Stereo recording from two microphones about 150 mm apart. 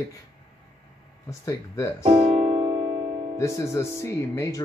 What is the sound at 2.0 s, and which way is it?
Keyboard, 45° right (ahead or behind).